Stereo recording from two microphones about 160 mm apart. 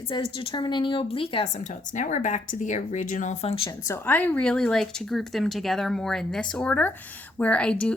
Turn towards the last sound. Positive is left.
turn(degrees=5)  # may be behind; listen again after turning